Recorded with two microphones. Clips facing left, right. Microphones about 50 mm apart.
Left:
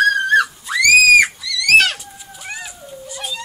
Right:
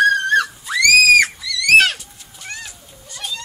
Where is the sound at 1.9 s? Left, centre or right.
Centre.